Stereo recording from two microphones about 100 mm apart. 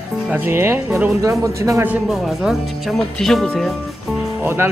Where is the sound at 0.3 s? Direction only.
20° right (ahead or behind).